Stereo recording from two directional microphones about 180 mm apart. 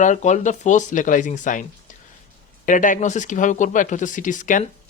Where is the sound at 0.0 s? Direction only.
40° left (ahead or behind).